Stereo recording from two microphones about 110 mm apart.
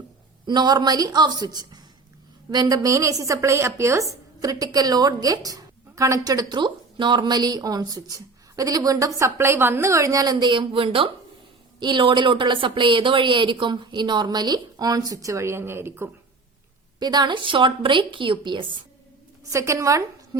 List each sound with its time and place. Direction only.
0.4 s a woman's voice: 40° right (ahead or behind); by 16.0 s 20° right (ahead or behind)
17.0 s speech: 40° right (ahead or behind)
19.5 s a woman's voice: 30° right (ahead or behind)